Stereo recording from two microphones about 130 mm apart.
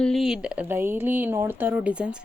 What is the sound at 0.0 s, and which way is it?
Speech, centre (ahead or behind).